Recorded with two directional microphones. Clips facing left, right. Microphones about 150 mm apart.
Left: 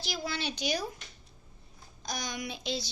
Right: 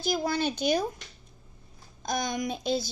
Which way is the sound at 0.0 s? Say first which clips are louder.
Right 8 dB; 50° right (ahead or behind).